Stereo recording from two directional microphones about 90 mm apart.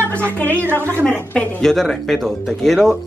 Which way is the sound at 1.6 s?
5° left (ahead or behind).